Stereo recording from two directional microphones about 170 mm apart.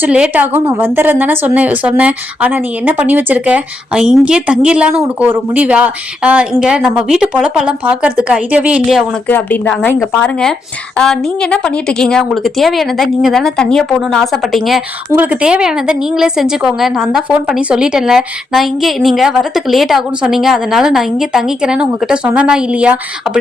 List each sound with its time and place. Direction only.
0.0 s a woman's voice: 5° right (ahead or behind)
9.2 s a woman's voice: 10° left (ahead or behind); by 23.4 s 5° right (ahead or behind)